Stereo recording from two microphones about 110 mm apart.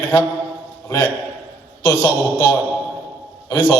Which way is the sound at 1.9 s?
15° left (ahead or behind).